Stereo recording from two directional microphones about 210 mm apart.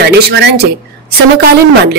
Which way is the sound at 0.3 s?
55° right (ahead or behind).